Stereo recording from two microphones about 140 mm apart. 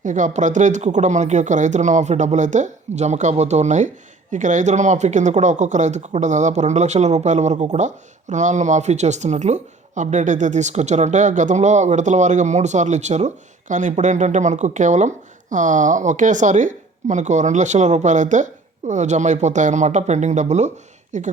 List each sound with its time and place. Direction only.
0.0 s speech: 60° right (ahead or behind)